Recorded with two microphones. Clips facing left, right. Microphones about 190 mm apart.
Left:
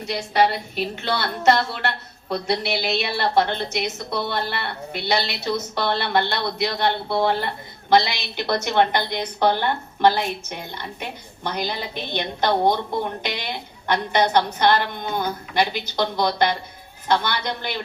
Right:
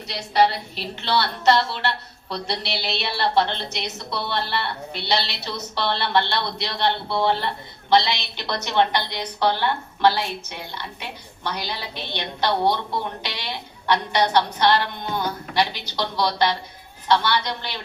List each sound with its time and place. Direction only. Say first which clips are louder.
0.0 s a woman's voice: even; 50° left (ahead or behind)